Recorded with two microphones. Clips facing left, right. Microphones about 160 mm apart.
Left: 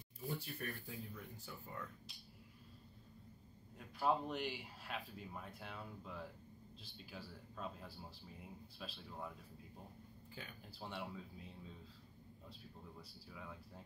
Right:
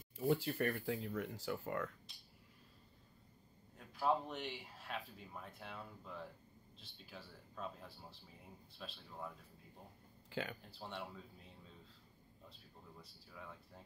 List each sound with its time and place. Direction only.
0.3 s speech: 90° right
3.7 s speech: centre (ahead or behind)
10.3 s speech: 90° right
10.6 s speech: centre (ahead or behind)
13.0 s speech: centre (ahead or behind)